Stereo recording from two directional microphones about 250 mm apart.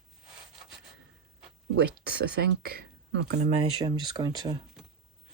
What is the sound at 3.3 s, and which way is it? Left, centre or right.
Speech, right.